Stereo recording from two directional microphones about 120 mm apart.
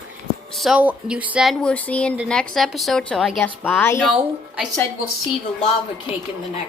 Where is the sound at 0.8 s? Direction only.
10° right (ahead or behind).